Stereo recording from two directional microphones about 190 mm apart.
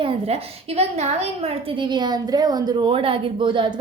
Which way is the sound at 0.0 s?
30° right (ahead or behind).